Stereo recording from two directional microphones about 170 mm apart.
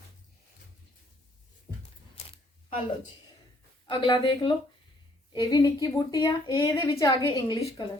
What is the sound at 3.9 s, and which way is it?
A woman's voice, 30° left (ahead or behind).